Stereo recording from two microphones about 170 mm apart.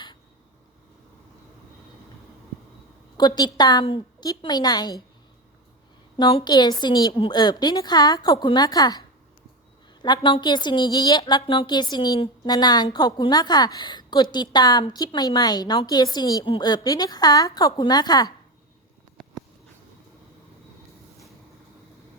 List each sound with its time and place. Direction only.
3.2 s a woman's voice: 25° left (ahead or behind)
6.1 s a woman's voice: 25° left (ahead or behind)